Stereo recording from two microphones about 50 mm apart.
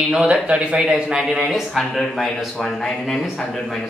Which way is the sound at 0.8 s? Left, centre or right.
Centre.